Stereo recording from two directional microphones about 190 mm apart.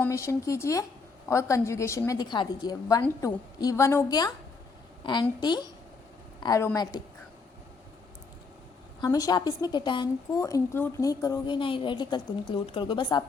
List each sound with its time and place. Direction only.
0.0 s a woman's voice: 15° left (ahead or behind)
9.0 s a woman's voice: 20° left (ahead or behind)